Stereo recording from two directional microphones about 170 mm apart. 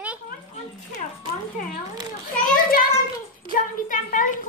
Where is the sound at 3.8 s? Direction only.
50° left (ahead or behind).